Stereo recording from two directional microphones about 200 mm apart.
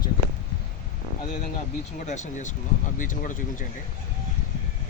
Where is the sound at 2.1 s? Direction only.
35° left (ahead or behind).